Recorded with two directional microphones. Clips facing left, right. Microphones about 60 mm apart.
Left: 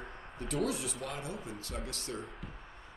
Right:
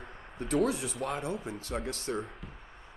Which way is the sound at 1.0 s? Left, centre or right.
Right.